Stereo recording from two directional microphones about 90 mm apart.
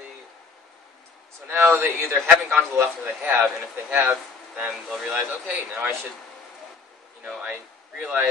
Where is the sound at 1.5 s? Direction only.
25° right (ahead or behind).